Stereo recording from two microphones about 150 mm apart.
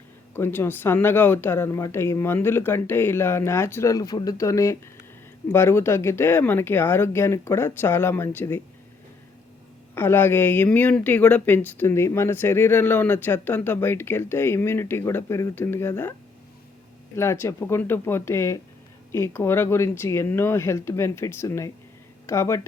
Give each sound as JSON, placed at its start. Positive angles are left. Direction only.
{"t": 0.3, "sound": "speech", "side_deg": 15}
{"t": 9.9, "sound": "speech", "side_deg": 15}
{"t": 17.2, "sound": "speech", "side_deg": 15}